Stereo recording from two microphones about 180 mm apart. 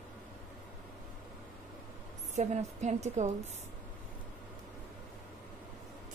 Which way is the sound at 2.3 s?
40° right (ahead or behind).